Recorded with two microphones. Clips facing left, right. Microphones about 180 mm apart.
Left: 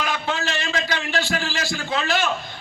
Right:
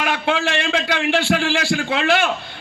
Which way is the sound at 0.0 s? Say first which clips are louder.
Right 5 dB; 75° right (ahead or behind).